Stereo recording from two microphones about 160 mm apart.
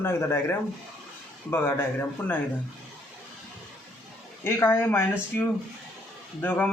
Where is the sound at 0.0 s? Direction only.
15° left (ahead or behind).